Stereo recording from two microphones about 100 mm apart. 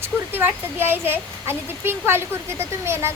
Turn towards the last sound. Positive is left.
turn(degrees=-25)  # may be behind; listen again after turning